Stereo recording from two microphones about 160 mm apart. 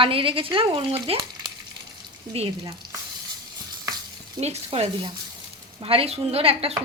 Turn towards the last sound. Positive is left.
turn(degrees=-35)  # may be behind; listen again after turning